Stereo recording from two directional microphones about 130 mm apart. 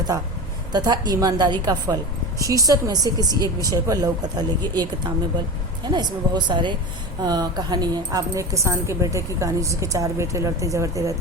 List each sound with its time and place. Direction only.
0.7 s a woman's voice: 35° right (ahead or behind)